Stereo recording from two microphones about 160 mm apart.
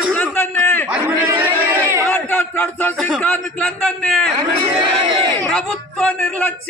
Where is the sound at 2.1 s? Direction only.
10° left (ahead or behind).